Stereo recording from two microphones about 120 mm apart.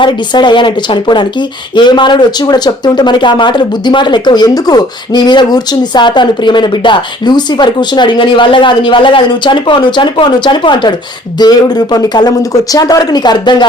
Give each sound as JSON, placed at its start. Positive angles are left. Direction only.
{"t": 0.0, "sound": "speech", "side_deg": 40}